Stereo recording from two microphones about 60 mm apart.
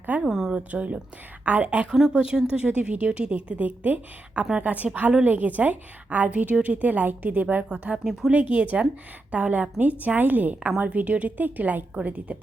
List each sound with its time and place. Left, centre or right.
0.2 s a sound: centre
0.7 s a woman's voice: right
1.9 s a woman's voice: centre